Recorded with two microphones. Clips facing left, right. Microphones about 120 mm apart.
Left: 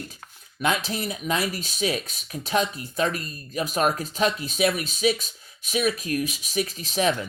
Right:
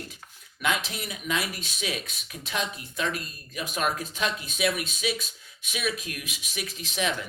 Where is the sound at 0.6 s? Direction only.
40° left (ahead or behind).